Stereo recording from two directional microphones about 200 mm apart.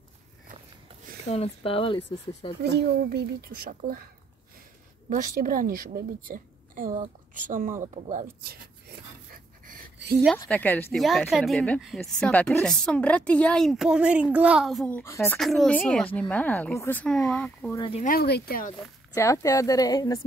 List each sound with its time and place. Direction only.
1.3 s speech: 30° left (ahead or behind)
2.6 s a woman's voice: 55° right (ahead or behind)
5.1 s a woman's voice: 40° right (ahead or behind)
8.8 s a sound: 50° right (ahead or behind)
10.5 s a woman's voice: 10° left (ahead or behind)
15.3 s a woman's voice: centre (ahead or behind)
17.7 s speech: 25° left (ahead or behind)
18.0 s speech: 50° left (ahead or behind)
19.1 s a woman's voice: 15° left (ahead or behind)